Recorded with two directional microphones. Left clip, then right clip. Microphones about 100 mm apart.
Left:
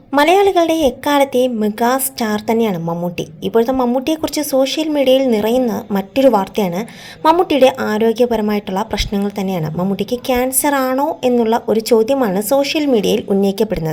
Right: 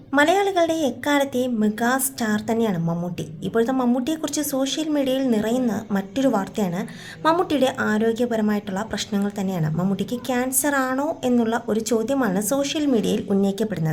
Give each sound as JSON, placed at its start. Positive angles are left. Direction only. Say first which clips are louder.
{"t": 0.1, "sound": "speech", "louder": "left 7 dB", "side_deg": 55}
{"t": 2.8, "sound": "a woman's voice", "louder": "left 8 dB", "side_deg": 30}
{"t": 3.2, "sound": "speech", "louder": "left 7 dB", "side_deg": 45}
{"t": 7.2, "sound": "speech", "louder": "left 8 dB", "side_deg": 45}